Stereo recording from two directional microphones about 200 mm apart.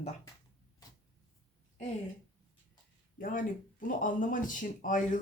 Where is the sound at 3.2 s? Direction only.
40° left (ahead or behind).